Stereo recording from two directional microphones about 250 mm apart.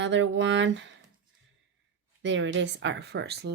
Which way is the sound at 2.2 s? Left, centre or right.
Right.